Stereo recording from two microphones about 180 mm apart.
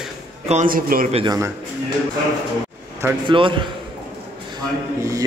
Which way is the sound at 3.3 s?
30° right (ahead or behind).